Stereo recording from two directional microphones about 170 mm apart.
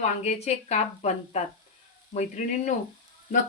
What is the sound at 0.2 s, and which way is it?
A woman's voice, 40° left (ahead or behind).